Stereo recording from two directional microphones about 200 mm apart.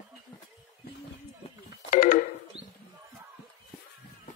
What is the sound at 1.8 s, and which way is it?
Telephone, 40° left (ahead or behind).